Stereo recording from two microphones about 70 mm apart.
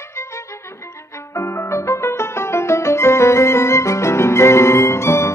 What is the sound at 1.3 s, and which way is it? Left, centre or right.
Music, left.